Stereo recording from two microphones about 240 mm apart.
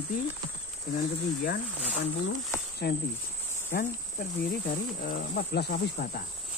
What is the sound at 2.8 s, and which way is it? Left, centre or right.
Speech, left.